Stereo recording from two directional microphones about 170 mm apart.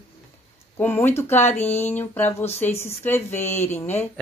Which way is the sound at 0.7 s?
10° left (ahead or behind).